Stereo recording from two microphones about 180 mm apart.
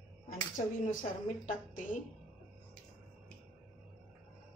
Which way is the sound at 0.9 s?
45° left (ahead or behind).